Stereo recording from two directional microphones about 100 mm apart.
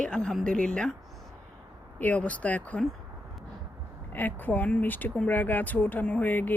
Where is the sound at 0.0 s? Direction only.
10° left (ahead or behind).